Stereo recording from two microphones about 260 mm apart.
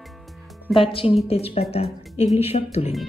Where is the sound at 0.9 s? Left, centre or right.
Left.